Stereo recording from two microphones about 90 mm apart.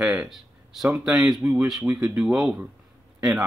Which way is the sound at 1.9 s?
15° right (ahead or behind).